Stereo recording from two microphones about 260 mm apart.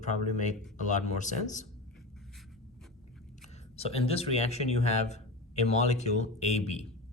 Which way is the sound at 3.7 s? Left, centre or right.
Left.